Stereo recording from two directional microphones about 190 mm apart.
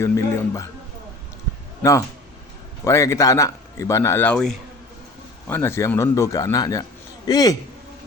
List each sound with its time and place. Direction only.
0.0 s a man's voice: 15° left (ahead or behind)
1.8 s a man's voice: 15° left (ahead or behind)